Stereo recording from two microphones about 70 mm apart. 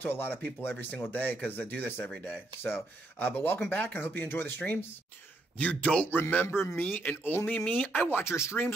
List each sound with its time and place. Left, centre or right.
0.0 s speech: left
6.4 s a man's voice: left
6.7 s speech: left